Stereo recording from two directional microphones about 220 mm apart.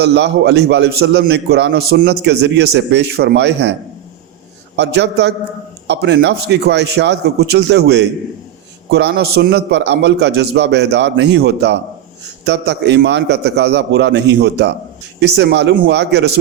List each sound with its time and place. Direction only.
0.0 s a man's voice: 50° right (ahead or behind)
4.8 s a man's voice: 50° right (ahead or behind)